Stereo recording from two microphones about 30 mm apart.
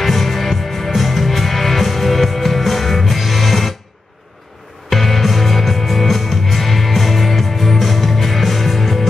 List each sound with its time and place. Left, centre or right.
0.0 s music: centre
4.8 s music: centre